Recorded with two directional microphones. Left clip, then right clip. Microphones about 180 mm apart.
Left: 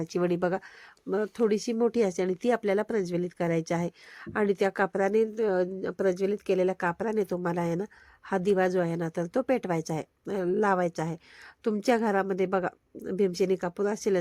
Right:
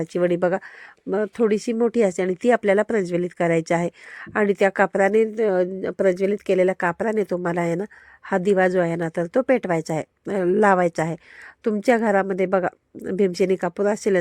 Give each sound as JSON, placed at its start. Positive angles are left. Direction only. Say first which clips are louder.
{"t": 0.0, "sound": "speech", "louder": "right 7 dB", "side_deg": -15}